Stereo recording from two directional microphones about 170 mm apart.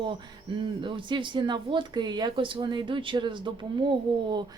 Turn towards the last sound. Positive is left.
turn(degrees=-25)  # may be behind; listen again after turning